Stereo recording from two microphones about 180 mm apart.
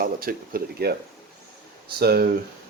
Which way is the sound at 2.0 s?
60° right (ahead or behind).